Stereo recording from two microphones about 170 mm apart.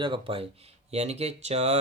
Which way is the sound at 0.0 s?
30° right (ahead or behind).